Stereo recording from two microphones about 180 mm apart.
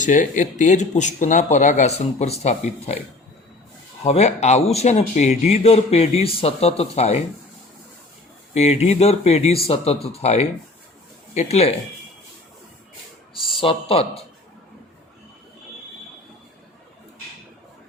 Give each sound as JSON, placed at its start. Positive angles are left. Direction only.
{"t": 0.0, "sound": "a man's voice", "side_deg": 45}
{"t": 4.0, "sound": "a man's voice", "side_deg": 35}
{"t": 8.5, "sound": "a man's voice", "side_deg": 40}
{"t": 13.6, "sound": "a man's voice", "side_deg": 30}